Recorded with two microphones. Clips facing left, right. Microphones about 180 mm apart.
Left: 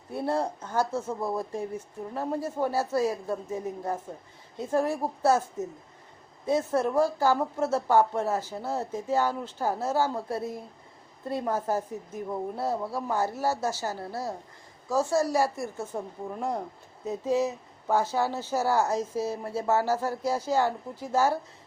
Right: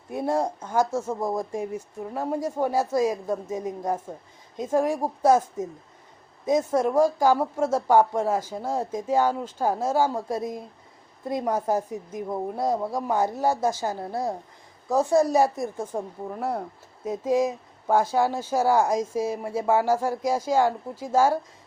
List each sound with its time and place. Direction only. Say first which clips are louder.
0.1 s a woman's voice: right 3 dB; 15° right (ahead or behind)